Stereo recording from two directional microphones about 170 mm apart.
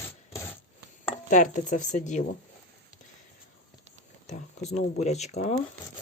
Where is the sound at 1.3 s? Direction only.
50° left (ahead or behind).